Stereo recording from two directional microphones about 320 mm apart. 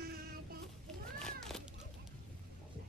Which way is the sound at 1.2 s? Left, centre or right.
Centre.